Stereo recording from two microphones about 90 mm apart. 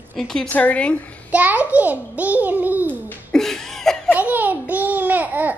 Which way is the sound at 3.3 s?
5° left (ahead or behind).